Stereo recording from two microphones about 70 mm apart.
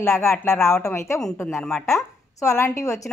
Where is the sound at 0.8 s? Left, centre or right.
Left.